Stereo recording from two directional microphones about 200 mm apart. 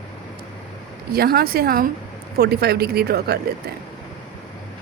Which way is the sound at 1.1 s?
50° right (ahead or behind).